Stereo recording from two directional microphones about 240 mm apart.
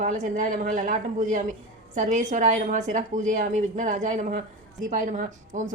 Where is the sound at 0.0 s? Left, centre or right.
Right.